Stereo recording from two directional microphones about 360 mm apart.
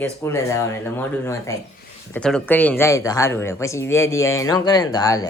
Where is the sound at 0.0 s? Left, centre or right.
Centre.